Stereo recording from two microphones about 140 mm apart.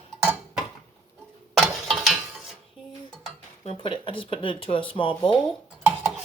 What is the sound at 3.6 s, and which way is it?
Speech, 35° left (ahead or behind).